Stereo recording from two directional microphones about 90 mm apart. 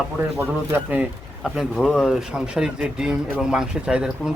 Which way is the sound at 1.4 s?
Centre (ahead or behind).